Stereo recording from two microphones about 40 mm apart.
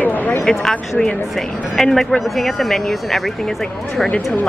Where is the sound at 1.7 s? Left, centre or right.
Centre.